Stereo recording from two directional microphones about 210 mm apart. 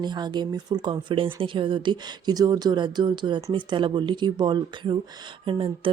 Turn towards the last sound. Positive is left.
turn(degrees=-25)  # may be behind; listen again after turning